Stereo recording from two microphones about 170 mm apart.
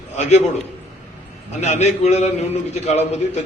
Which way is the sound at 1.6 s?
40° left (ahead or behind).